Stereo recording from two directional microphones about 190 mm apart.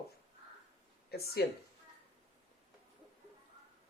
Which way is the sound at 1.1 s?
55° left (ahead or behind).